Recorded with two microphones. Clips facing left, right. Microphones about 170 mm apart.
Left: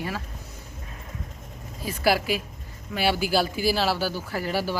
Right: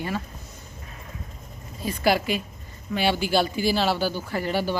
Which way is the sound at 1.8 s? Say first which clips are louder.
Right 1 dB; 5° left (ahead or behind).